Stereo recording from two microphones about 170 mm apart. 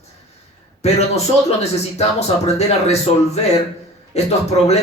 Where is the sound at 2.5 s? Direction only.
40° left (ahead or behind).